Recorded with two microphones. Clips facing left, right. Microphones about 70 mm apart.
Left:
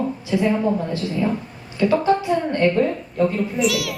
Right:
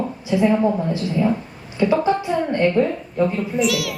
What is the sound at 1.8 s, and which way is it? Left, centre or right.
Speech, right.